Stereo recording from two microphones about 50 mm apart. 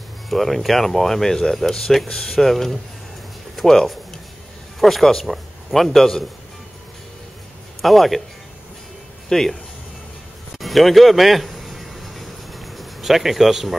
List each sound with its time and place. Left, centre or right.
0.3 s a man's voice: centre
7.8 s speech: centre
9.3 s speech: centre
10.6 s a sound: centre